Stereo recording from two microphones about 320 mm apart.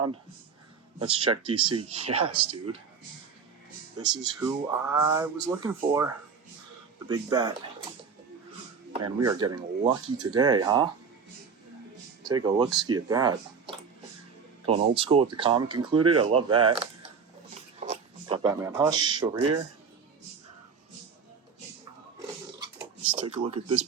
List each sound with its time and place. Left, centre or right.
0.9 s speech: centre
4.4 s speech: centre
7.1 s speech: centre
8.9 s speech: centre
12.2 s speech: centre
17.5 s a sound: centre
23.2 s speech: centre